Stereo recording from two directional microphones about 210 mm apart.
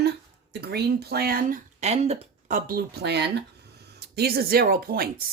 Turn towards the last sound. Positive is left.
turn(degrees=-45)  # may be behind; listen again after turning